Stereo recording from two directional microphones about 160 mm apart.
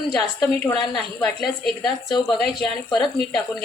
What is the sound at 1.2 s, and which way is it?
A woman's voice, 5° left (ahead or behind).